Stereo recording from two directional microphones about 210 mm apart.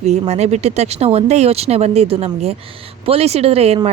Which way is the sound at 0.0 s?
30° right (ahead or behind).